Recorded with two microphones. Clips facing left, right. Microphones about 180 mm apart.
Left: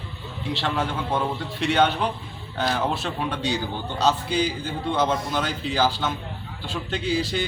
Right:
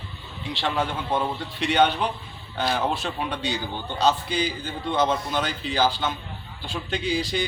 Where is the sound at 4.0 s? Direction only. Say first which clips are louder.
Left 1 dB; 10° left (ahead or behind).